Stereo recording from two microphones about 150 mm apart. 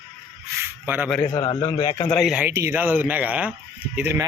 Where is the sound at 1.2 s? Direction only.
30° left (ahead or behind).